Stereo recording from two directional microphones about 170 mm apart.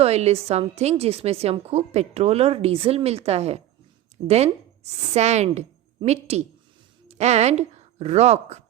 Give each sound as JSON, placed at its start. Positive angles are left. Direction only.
{"t": 0.0, "sound": "a woman's voice", "side_deg": -40}